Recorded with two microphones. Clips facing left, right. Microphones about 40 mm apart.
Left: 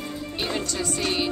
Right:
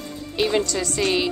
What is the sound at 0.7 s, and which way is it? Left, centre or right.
Speech, right.